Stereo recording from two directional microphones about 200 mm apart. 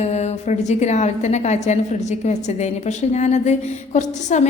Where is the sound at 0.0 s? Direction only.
35° left (ahead or behind).